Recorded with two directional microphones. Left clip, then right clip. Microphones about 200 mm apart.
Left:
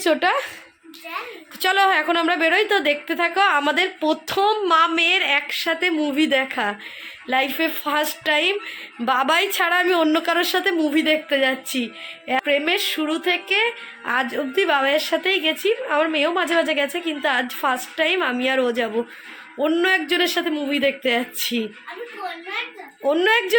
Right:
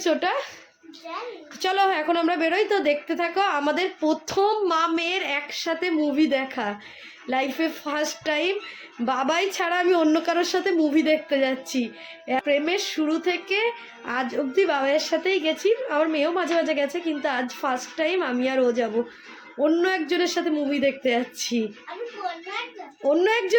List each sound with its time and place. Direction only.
0.0 s a woman's voice: 20° left (ahead or behind)
1.6 s a woman's voice: centre (ahead or behind)
23.0 s a woman's voice: centre (ahead or behind)